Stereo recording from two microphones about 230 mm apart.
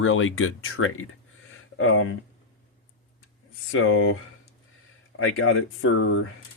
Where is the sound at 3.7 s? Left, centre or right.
Left.